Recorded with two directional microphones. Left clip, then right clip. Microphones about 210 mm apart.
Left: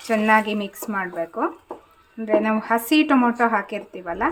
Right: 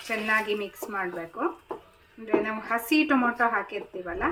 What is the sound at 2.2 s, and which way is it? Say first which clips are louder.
A woman's voice: left 7 dB; 50° left (ahead or behind).